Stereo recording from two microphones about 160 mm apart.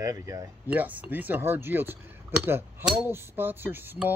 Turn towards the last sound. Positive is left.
turn(degrees=-10)  # may be behind; listen again after turning